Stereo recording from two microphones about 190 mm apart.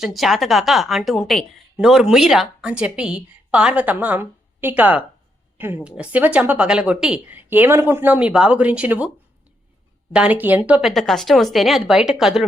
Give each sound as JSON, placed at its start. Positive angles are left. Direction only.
{"t": 0.0, "sound": "a woman's voice", "side_deg": 0}